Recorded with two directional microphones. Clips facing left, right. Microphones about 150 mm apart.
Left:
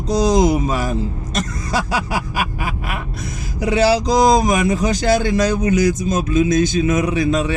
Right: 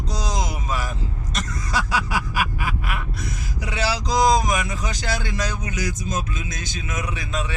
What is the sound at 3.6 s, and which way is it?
A man's voice, 40° left (ahead or behind).